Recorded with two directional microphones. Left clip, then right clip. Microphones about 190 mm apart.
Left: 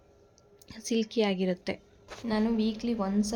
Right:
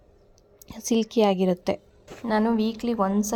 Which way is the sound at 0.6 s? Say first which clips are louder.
Right 5 dB; 35° right (ahead or behind).